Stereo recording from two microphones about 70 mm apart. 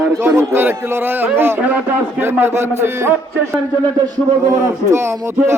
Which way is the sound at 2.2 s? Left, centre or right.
Right.